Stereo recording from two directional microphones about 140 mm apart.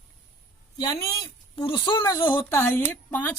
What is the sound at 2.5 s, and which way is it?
Speech, 15° left (ahead or behind).